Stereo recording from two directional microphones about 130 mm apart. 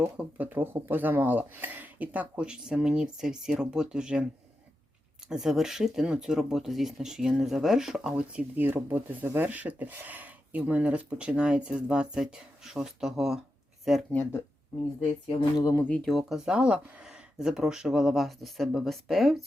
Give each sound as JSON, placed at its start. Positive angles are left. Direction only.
{"t": 0.2, "sound": "speech", "side_deg": -10}
{"t": 5.3, "sound": "speech", "side_deg": -5}
{"t": 15.5, "sound": "speech", "side_deg": 25}
{"t": 15.8, "sound": "speech", "side_deg": 5}